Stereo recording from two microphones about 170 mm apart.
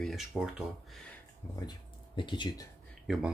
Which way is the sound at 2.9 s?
Centre (ahead or behind).